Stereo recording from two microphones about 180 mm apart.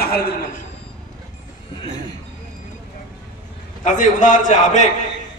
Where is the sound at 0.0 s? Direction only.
60° left (ahead or behind).